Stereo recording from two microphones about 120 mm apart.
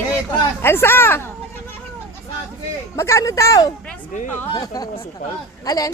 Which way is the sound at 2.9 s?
25° left (ahead or behind).